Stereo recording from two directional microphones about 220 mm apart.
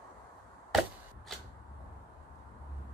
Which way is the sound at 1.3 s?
Centre (ahead or behind).